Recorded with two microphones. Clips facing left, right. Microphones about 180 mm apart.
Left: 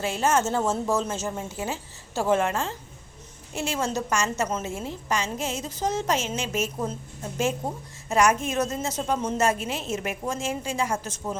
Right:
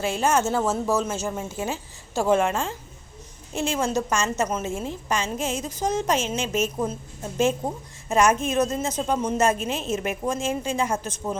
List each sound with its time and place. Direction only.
0.0 s a woman's voice: 15° right (ahead or behind)